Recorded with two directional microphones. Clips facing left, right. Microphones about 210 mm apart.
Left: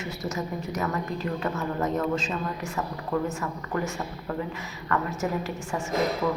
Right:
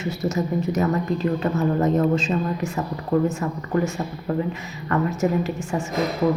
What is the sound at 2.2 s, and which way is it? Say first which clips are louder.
Speech: right 7 dB; 15° right (ahead or behind).